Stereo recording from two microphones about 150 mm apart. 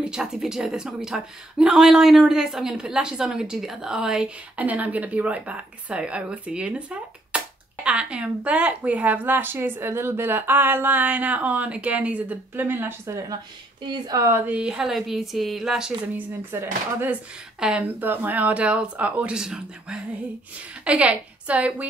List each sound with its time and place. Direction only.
0.0 s a woman's voice: 5° right (ahead or behind)
16.5 s speech: 15° right (ahead or behind)